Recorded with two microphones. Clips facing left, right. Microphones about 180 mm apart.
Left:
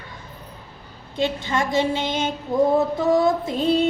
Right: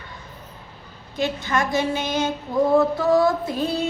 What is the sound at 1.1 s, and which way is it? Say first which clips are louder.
Female singing: even; 25° left (ahead or behind).